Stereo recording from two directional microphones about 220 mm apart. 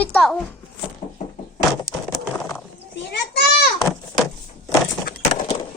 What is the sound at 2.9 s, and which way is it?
Children playing, 50° left (ahead or behind).